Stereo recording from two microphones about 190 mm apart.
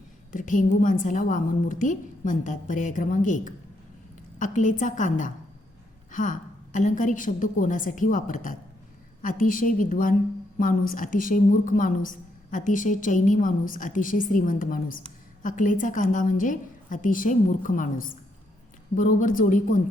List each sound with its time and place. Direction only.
0.3 s a woman's voice: 45° left (ahead or behind)